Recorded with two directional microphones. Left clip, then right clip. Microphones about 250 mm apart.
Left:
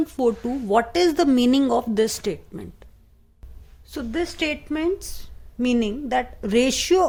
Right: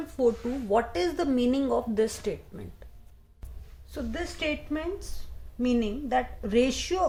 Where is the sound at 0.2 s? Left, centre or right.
Left.